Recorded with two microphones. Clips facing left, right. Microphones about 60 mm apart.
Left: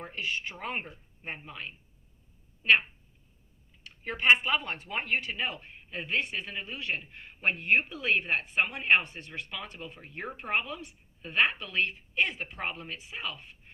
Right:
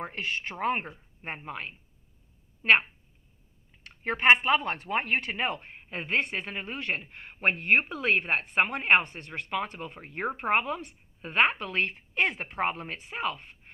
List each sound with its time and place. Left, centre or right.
0.0 s speech: right
3.8 s speech: right
6.3 s speech: right
7.3 s speech: right
12.5 s speech: right